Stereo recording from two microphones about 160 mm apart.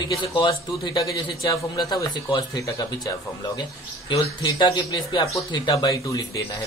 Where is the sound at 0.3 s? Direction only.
25° left (ahead or behind).